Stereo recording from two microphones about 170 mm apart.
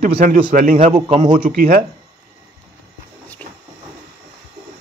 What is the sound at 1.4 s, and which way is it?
Speech, 50° right (ahead or behind).